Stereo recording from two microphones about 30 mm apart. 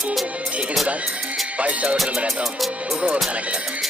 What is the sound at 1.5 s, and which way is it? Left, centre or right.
Music, right.